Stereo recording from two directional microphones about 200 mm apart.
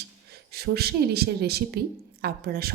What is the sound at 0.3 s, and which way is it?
A woman's voice, 55° right (ahead or behind).